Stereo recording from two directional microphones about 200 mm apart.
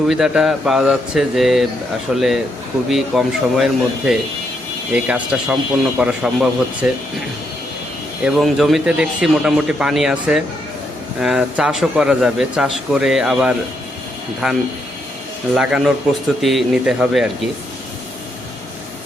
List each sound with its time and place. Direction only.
0.1 s speech: centre (ahead or behind)
8.2 s speech: centre (ahead or behind)